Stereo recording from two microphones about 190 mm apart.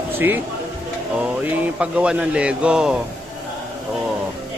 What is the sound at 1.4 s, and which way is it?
Speech, 5° right (ahead or behind).